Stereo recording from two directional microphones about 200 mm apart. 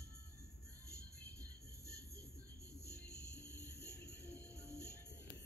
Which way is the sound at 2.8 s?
55° left (ahead or behind).